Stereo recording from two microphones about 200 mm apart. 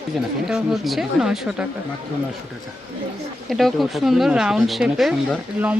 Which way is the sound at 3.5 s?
Centre (ahead or behind).